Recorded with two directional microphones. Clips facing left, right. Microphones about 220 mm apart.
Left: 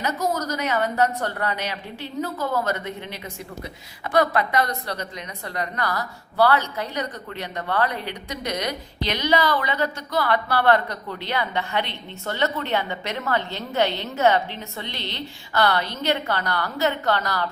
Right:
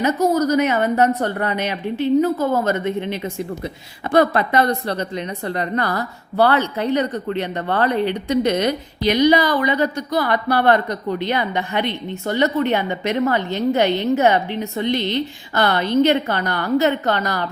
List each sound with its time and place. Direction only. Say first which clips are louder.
0.0 s a woman's voice: right 8 dB; 20° right (ahead or behind)
2.4 s speech: right 6 dB; 45° right (ahead or behind)
2.6 s a woman's voice: right 8 dB; 25° right (ahead or behind)
9.0 s a woman's voice: right 7 dB; 15° right (ahead or behind)